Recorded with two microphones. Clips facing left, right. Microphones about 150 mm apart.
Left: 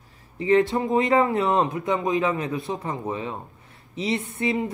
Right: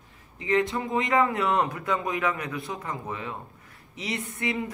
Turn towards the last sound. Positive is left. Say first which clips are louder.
# left 5 dB
turn(degrees=25)  # may be behind; listen again after turning